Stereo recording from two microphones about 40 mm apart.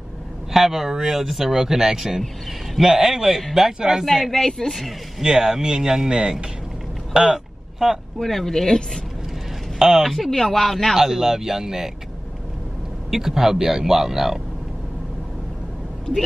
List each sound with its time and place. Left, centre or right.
0.5 s speech: centre
4.3 s speech: centre
5.2 s speech: centre
7.8 s speech: centre
8.2 s speech: centre
9.8 s speech: centre
11.0 s speech: centre
13.1 s speech: centre